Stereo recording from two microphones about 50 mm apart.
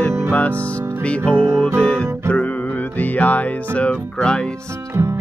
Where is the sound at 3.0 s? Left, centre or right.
Left.